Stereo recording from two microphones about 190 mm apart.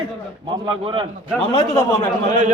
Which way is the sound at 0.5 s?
25° right (ahead or behind).